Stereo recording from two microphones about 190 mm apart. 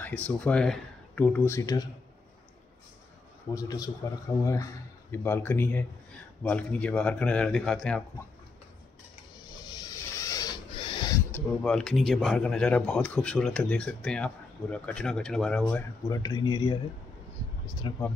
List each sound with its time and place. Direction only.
0.0 s speech: 5° left (ahead or behind)
3.5 s a man's voice: 20° left (ahead or behind); by 8.0 s 5° left (ahead or behind)
9.5 s a sound: 20° left (ahead or behind)
11.3 s speech: 5° left (ahead or behind)
16.1 s speech: 20° left (ahead or behind)
17.8 s speech: 25° left (ahead or behind)